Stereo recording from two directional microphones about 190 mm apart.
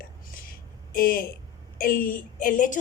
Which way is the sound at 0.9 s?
50° left (ahead or behind).